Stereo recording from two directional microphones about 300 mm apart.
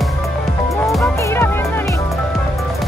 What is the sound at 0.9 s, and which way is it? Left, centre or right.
Music, centre.